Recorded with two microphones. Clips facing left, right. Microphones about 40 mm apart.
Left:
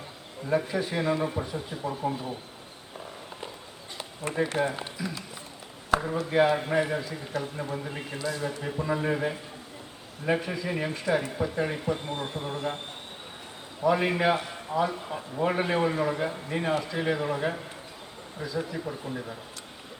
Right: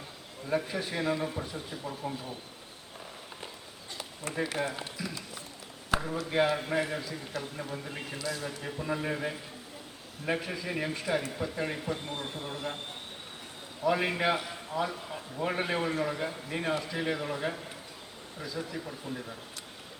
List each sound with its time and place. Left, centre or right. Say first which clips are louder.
0.4 s a man's voice: left 4 dB; centre
3.9 s a sound: left 5 dB; left
4.6 s a man's voice: left 5 dB; centre
13.8 s a man's voice: left 4 dB; centre